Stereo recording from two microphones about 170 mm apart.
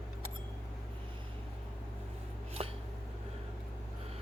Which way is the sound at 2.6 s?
35° right (ahead or behind).